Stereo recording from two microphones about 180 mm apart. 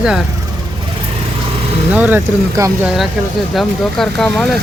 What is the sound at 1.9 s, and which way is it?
Speech, 10° right (ahead or behind).